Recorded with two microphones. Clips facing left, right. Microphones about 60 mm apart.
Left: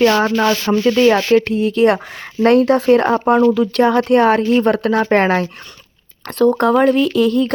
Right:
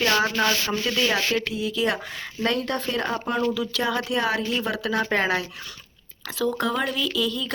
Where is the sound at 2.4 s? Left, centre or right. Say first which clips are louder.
Left 14 dB; left.